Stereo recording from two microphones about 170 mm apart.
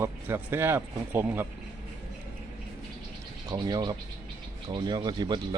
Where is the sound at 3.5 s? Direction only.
25° right (ahead or behind).